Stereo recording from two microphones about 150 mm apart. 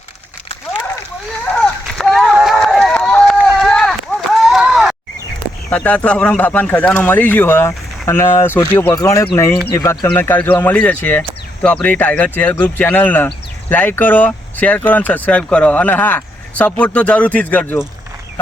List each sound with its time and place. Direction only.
1.5 s run: 5° left (ahead or behind)
5.7 s speech: 10° left (ahead or behind)